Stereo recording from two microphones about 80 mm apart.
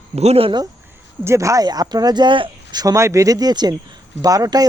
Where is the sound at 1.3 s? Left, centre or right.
Right.